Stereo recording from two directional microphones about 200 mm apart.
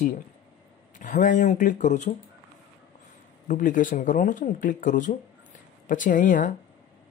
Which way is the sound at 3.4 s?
40° left (ahead or behind).